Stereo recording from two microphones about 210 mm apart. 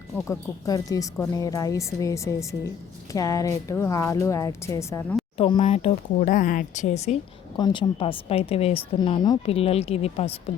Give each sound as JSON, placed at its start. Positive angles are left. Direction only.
{"t": 0.3, "sound": "a woman's voice", "side_deg": 15}
{"t": 5.4, "sound": "speech", "side_deg": 25}
{"t": 7.5, "sound": "a woman's voice", "side_deg": 20}